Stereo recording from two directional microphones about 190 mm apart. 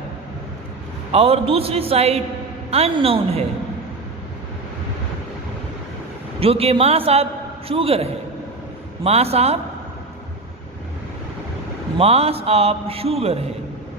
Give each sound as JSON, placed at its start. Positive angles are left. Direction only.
{"t": 1.1, "sound": "a man's voice", "side_deg": -30}
{"t": 6.4, "sound": "a man's voice", "side_deg": -30}
{"t": 12.0, "sound": "a man's voice", "side_deg": -30}